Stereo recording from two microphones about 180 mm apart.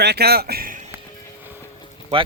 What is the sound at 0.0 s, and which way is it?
Speech, 65° right (ahead or behind).